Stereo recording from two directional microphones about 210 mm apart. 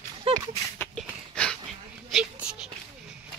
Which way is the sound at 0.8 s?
5° left (ahead or behind).